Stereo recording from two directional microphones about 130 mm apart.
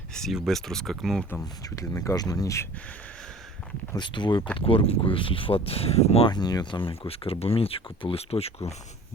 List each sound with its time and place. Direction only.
0.1 s speech: centre (ahead or behind)
1.6 s speech: 25° left (ahead or behind)
3.9 s speech: 35° left (ahead or behind)
6.3 s speech: 30° left (ahead or behind); by 8.7 s 50° left (ahead or behind)